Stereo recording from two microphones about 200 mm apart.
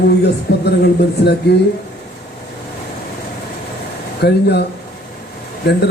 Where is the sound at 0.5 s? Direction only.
55° left (ahead or behind).